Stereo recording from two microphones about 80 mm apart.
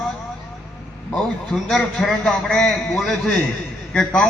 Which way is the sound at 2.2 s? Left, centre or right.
Centre.